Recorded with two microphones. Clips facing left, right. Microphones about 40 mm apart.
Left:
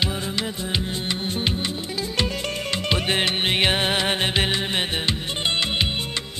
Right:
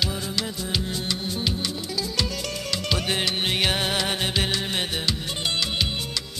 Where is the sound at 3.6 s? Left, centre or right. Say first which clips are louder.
Left 3 dB; left.